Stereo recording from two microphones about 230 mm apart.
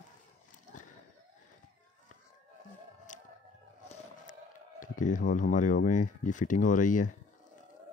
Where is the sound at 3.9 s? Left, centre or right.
Left.